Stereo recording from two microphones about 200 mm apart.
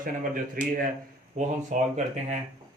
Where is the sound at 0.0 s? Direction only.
45° right (ahead or behind).